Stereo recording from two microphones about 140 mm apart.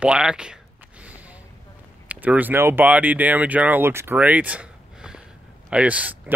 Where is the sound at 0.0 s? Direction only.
5° right (ahead or behind).